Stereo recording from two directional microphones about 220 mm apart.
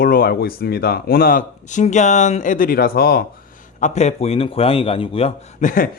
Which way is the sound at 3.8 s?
30° left (ahead or behind).